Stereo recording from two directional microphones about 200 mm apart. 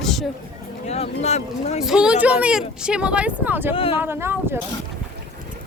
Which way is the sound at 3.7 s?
25° left (ahead or behind).